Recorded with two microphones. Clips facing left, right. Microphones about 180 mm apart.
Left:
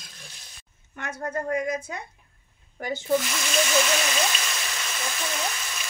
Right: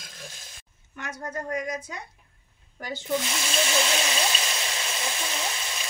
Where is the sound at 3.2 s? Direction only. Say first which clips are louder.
Left 2 dB; 25° right (ahead or behind).